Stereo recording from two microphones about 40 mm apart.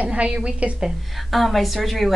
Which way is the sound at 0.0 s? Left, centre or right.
Right.